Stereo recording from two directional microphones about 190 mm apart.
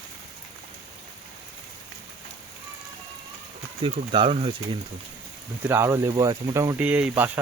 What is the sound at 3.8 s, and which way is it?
Speech, 30° right (ahead or behind).